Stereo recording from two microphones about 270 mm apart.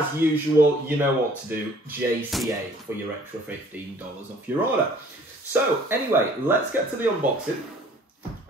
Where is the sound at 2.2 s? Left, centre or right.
Centre.